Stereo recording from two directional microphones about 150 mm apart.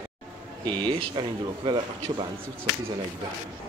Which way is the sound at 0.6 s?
30° right (ahead or behind).